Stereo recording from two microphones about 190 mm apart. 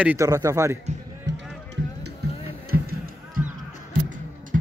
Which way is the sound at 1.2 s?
65° right (ahead or behind).